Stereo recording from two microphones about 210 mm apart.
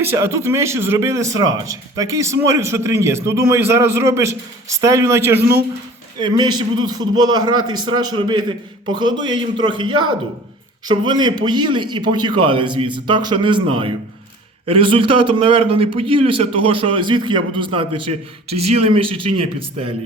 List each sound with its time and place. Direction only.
0.0 s a man's voice: 10° right (ahead or behind)